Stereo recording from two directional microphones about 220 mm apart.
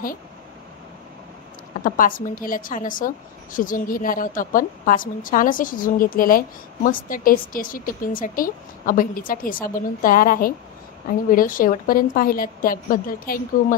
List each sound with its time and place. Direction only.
1.8 s a woman's voice: 40° left (ahead or behind)